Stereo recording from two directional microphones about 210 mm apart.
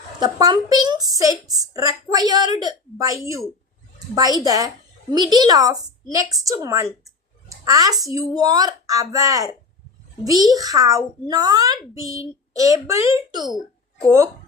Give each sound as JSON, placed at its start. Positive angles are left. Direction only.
{"t": 0.2, "sound": "a child's voice", "side_deg": -20}
{"t": 4.4, "sound": "a child's voice", "side_deg": -15}